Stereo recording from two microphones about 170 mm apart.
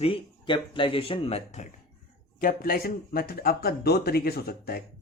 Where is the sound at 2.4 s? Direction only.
60° left (ahead or behind).